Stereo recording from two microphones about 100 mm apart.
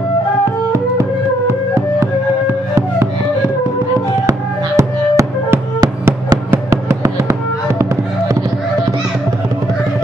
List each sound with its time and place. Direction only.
2.7 s music: 25° right (ahead or behind)
7.8 s fireworks: 35° right (ahead or behind)